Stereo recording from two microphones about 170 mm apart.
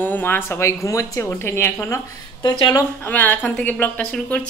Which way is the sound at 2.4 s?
25° left (ahead or behind).